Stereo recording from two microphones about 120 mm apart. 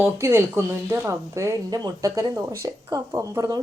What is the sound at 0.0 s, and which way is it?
Speech, 20° right (ahead or behind).